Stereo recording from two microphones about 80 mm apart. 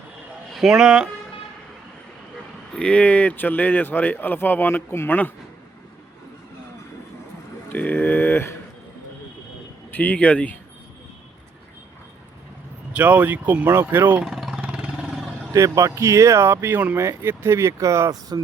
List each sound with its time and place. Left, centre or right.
0.5 s speech: centre
2.7 s speech: centre
7.7 s speech: left
9.9 s speech: centre
12.9 s speech: centre
14.3 s vehicle: centre
14.6 s vehicle: centre
15.5 s speech: right
18.1 s speech: right